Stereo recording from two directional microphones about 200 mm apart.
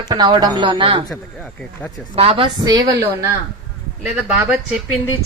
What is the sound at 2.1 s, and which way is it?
Speech, 30° right (ahead or behind).